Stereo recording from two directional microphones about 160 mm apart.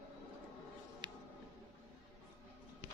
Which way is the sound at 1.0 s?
25° right (ahead or behind).